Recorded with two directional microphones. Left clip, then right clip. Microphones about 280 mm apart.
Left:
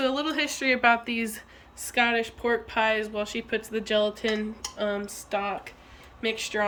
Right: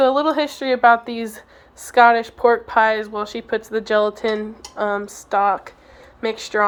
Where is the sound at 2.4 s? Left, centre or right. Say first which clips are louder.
Right 15 dB; right.